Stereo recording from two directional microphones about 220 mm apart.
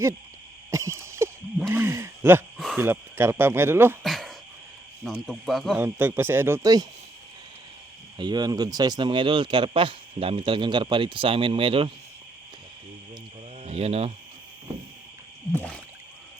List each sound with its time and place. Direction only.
0.7 s a sound: 15° right (ahead or behind)
1.0 s wild animals: 10° right (ahead or behind)
1.5 s speech: 5° right (ahead or behind)
4.0 s a sound: centre (ahead or behind)
5.0 s cricket: centre (ahead or behind)
5.7 s speech: 10° right (ahead or behind)
8.2 s speech: 20° right (ahead or behind)
13.6 s speech: 25° right (ahead or behind)
15.5 s a sound: 5° left (ahead or behind)